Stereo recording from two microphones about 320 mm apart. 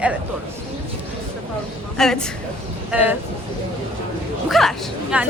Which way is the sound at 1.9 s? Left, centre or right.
Centre.